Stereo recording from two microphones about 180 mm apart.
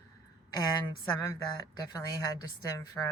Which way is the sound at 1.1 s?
20° left (ahead or behind).